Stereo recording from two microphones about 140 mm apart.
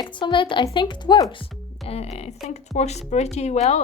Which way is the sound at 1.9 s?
50° left (ahead or behind).